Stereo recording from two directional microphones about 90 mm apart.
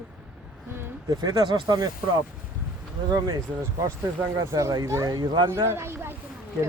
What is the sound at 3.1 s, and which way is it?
Speech, 45° right (ahead or behind).